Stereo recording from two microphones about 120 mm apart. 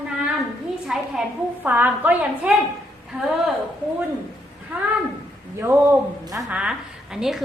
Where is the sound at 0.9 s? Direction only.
5° right (ahead or behind).